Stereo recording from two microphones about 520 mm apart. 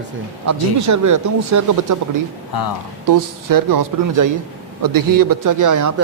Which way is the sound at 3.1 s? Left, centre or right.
Right.